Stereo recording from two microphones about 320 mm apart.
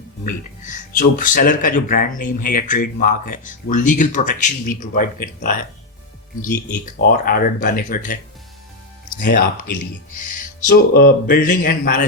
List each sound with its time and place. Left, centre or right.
0.3 s speech: left